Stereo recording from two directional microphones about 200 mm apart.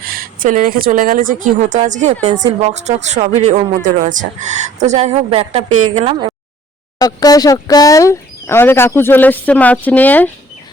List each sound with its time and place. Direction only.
0.1 s speech: 45° right (ahead or behind)
7.0 s speech: 20° left (ahead or behind)